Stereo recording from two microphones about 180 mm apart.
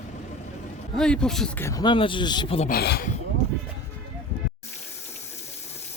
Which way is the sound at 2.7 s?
60° left (ahead or behind).